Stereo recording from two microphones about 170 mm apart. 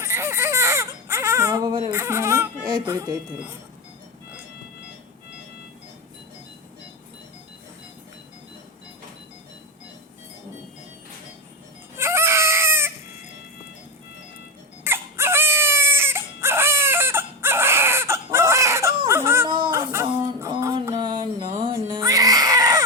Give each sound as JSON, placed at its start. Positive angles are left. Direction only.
{"t": 0.0, "sound": "baby cry", "side_deg": -15}
{"t": 1.9, "sound": "speech", "side_deg": -15}
{"t": 11.9, "sound": "baby cry", "side_deg": -15}
{"t": 14.8, "sound": "baby cry", "side_deg": -15}
{"t": 19.0, "sound": "a sound", "side_deg": -15}
{"t": 19.5, "sound": "a sound", "side_deg": -30}
{"t": 19.7, "sound": "a sound", "side_deg": -15}
{"t": 20.8, "sound": "music", "side_deg": -25}
{"t": 21.6, "sound": "baby cry", "side_deg": -30}